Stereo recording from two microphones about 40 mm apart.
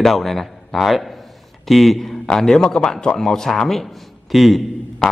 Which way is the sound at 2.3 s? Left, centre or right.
Centre.